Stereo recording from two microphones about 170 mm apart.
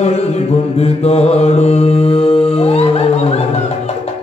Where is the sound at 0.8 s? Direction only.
40° left (ahead or behind).